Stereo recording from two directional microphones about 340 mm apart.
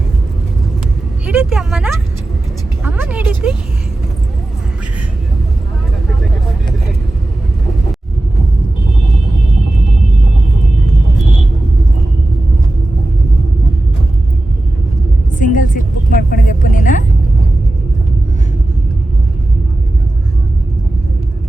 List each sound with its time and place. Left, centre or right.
1.2 s vehicle: centre
2.8 s music: centre
15.4 s vehicle: left